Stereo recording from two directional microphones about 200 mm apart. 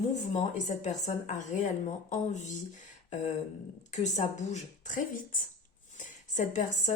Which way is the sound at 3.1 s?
35° left (ahead or behind).